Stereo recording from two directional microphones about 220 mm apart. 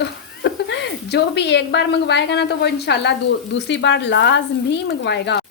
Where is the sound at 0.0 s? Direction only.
50° left (ahead or behind).